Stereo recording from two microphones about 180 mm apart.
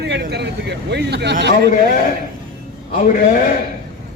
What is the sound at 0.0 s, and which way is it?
A man's voice, 70° right (ahead or behind).